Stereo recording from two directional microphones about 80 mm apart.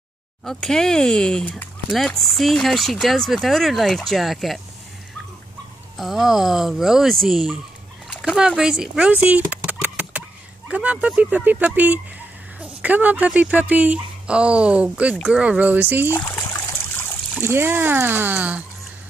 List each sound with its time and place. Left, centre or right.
0.5 s speech: centre
2.1 s speech: centre
5.9 s a woman's voice: centre
9.1 s a sound: right
10.7 s a woman's voice: centre
16.3 s trickle: left
17.4 s speech: right